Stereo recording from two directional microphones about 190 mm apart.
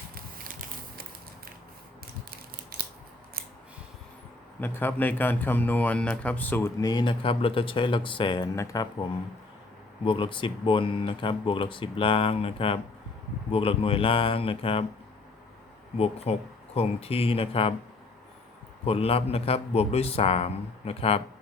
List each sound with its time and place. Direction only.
4.6 s speech: 10° left (ahead or behind)
6.8 s speech: 25° left (ahead or behind)
16.0 s a man's voice: 30° left (ahead or behind)
18.9 s a man's voice: 30° left (ahead or behind)